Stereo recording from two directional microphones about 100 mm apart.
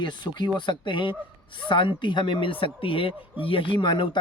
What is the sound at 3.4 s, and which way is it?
Speech, 60° left (ahead or behind).